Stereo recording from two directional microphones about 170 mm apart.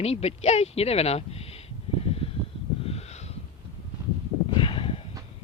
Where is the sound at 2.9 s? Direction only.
40° left (ahead or behind).